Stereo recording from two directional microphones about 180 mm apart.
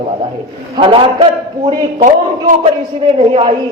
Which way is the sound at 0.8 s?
30° right (ahead or behind).